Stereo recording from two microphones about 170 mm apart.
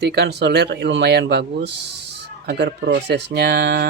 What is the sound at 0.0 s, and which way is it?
Speech, 80° right.